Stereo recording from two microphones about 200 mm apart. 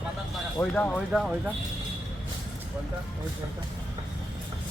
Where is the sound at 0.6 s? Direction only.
10° left (ahead or behind).